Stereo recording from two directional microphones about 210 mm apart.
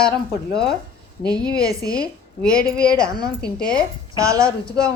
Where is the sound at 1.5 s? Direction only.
15° right (ahead or behind).